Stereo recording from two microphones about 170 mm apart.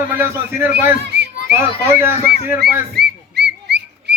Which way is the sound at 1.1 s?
85° right.